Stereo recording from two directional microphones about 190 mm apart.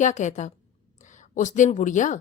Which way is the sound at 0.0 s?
40° left (ahead or behind).